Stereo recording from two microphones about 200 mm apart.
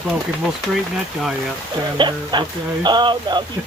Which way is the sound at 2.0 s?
20° right (ahead or behind).